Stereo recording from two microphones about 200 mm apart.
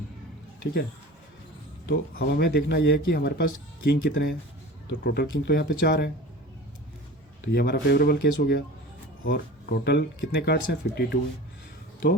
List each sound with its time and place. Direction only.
0.6 s speech: 55° left (ahead or behind)
1.9 s speech: 50° left (ahead or behind)
7.5 s speech: 55° left (ahead or behind)